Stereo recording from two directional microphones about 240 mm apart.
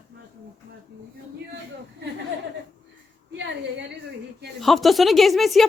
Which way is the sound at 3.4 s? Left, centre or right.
Right.